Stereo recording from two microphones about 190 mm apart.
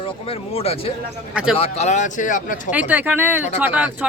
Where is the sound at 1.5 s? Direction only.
35° left (ahead or behind).